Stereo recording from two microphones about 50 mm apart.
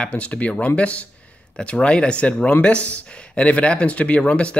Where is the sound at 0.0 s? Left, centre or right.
Left.